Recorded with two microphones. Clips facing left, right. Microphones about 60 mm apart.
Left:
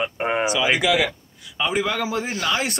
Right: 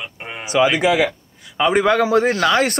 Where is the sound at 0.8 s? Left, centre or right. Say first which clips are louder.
Right 4 dB; right.